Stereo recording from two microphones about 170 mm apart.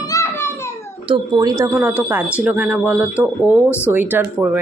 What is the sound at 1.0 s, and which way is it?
Speech, 25° right (ahead or behind).